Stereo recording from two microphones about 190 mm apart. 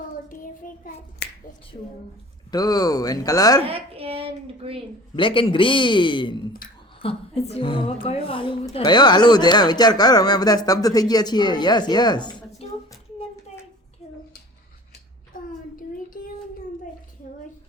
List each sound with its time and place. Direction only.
0.6 s hands: 45° left (ahead or behind)
2.5 s speech: 20° left (ahead or behind)
3.6 s a woman's voice: 30° right (ahead or behind)
5.1 s speech: 25° left (ahead or behind)
15.3 s child singing: 45° left (ahead or behind)